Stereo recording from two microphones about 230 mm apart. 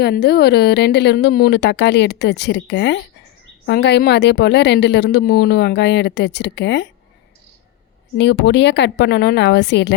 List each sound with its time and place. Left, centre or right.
0.0 s a woman's voice: left
8.2 s a woman's voice: left